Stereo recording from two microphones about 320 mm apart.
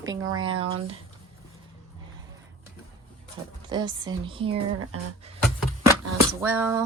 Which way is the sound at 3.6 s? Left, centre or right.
Centre.